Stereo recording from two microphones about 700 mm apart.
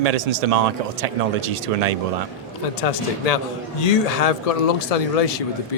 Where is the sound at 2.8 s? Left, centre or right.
Left.